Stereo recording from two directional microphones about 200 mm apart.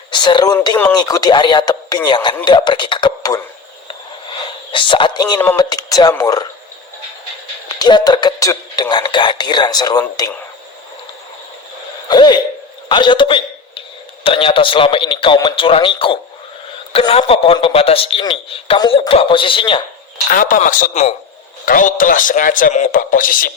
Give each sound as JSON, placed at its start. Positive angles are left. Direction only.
{"t": 0.1, "sound": "a man's voice", "side_deg": 20}
{"t": 7.7, "sound": "a man's voice", "side_deg": 20}
{"t": 12.0, "sound": "a man's voice", "side_deg": 20}
{"t": 12.9, "sound": "a sound", "side_deg": 25}
{"t": 14.3, "sound": "a man's voice", "side_deg": 25}
{"t": 20.3, "sound": "a man's voice", "side_deg": 40}